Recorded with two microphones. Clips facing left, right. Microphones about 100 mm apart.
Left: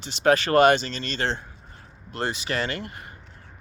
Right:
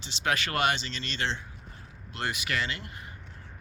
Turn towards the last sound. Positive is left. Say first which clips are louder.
# left 6 dB
turn(degrees=55)  # may be behind; listen again after turning